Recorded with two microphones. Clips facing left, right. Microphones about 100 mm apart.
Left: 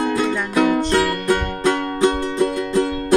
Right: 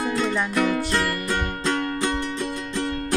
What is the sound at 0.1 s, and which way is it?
Music, 15° left (ahead or behind).